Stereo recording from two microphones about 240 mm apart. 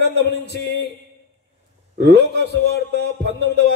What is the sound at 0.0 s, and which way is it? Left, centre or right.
Speech, right.